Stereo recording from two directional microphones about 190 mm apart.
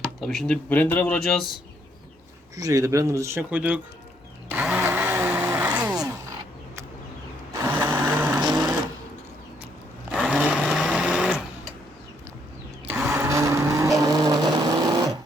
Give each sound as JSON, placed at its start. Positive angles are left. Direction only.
{"t": 0.2, "sound": "speech", "side_deg": 0}
{"t": 2.6, "sound": "speech", "side_deg": -15}
{"t": 4.4, "sound": "blender", "side_deg": -10}
{"t": 7.5, "sound": "sewing machine", "side_deg": -15}
{"t": 10.1, "sound": "sewing machine", "side_deg": -5}
{"t": 12.9, "sound": "vehicle", "side_deg": -10}
{"t": 14.0, "sound": "a sound", "side_deg": -20}